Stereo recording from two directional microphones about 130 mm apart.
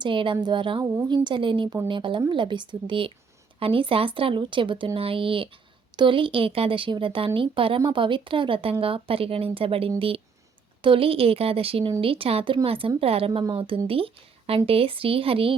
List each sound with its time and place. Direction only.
0.0 s speech: 40° right (ahead or behind)